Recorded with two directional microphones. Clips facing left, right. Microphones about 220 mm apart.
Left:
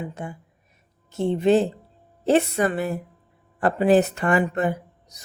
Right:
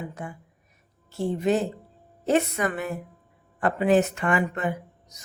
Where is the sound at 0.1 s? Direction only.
25° left (ahead or behind).